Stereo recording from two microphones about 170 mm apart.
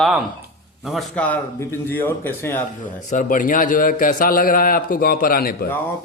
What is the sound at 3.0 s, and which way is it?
A man's voice, 50° left (ahead or behind).